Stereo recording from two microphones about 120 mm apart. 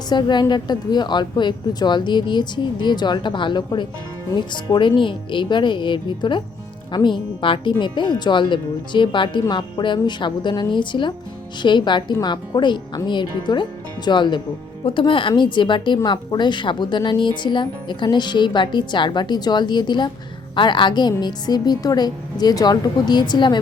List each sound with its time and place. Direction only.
0.1 s speech: 35° left (ahead or behind)